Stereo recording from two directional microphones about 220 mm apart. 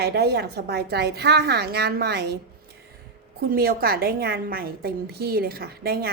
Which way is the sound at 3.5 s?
45° right (ahead or behind).